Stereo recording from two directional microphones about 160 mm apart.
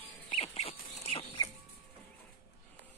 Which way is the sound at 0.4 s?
40° left (ahead or behind).